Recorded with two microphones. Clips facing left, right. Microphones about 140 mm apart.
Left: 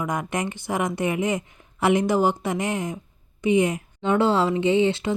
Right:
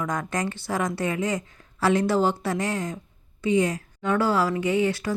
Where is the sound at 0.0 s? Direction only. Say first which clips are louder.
Left 1 dB; 20° left (ahead or behind).